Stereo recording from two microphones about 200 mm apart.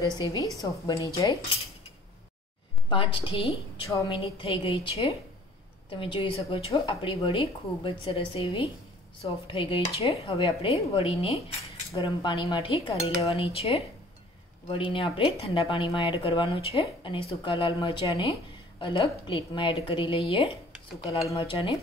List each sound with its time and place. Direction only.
0.2 s a woman's voice: 20° left (ahead or behind)
2.9 s a woman's voice: 25° left (ahead or behind)